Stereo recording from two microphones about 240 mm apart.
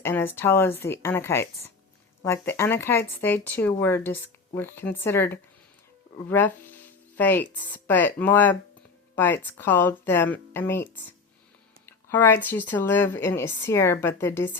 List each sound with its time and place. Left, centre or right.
0.0 s speech: centre